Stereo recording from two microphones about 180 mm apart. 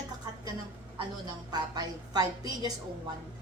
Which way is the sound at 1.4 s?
20° right (ahead or behind).